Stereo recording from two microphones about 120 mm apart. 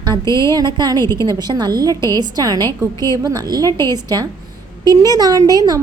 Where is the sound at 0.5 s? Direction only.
35° right (ahead or behind).